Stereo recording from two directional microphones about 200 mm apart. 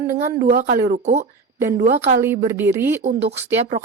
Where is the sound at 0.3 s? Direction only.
45° right (ahead or behind).